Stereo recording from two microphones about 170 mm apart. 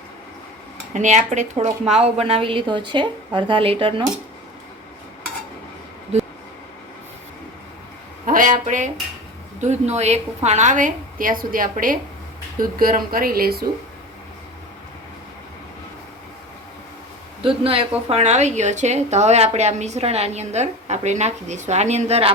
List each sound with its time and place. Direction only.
0.9 s a woman's voice: 45° right (ahead or behind)
8.3 s a woman's voice: 50° right (ahead or behind)
17.4 s a woman's voice: 30° right (ahead or behind)